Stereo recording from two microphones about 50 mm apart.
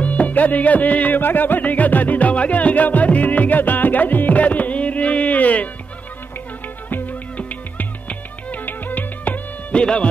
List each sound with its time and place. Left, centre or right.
0.0 s music: left
6.9 s music: left
9.8 s speech: left